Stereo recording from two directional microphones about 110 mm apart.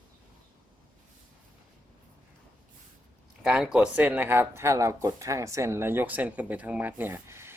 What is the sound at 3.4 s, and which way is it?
Speech, 5° right (ahead or behind).